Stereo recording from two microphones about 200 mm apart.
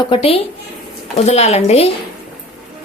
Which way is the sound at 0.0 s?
25° left (ahead or behind).